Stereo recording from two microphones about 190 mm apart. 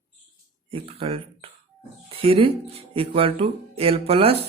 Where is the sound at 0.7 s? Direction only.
30° right (ahead or behind).